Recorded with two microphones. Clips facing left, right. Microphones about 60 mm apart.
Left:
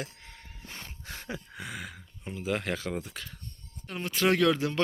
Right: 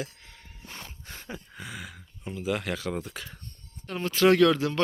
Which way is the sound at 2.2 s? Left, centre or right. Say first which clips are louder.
Right 1 dB; left.